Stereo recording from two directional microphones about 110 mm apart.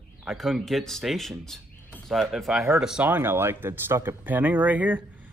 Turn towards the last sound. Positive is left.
turn(degrees=-15)  # may be behind; listen again after turning